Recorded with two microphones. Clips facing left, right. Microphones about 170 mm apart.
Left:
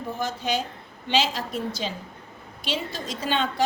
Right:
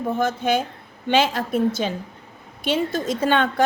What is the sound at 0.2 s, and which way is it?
A woman's voice, 55° right (ahead or behind).